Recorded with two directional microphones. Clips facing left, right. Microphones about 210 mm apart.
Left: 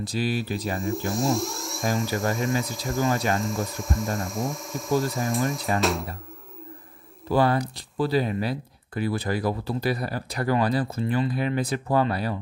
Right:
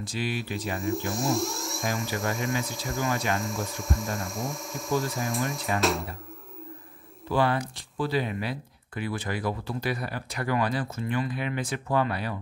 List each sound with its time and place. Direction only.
0.0 s speech: 35° left (ahead or behind)
0.7 s speech: centre (ahead or behind)
7.2 s speech: 40° left (ahead or behind)